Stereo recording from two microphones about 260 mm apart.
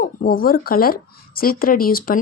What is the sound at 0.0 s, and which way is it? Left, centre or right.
Speech, left.